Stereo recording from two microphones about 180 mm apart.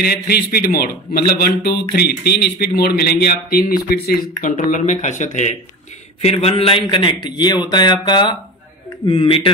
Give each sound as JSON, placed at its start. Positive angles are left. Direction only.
{"t": 0.0, "sound": "a man's voice", "side_deg": 60}